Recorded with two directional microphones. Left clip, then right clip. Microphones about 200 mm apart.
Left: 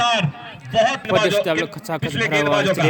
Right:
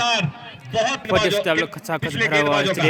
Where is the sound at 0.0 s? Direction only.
10° left (ahead or behind).